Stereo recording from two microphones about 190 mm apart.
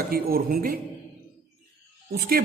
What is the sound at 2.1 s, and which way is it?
Speech, 50° right (ahead or behind).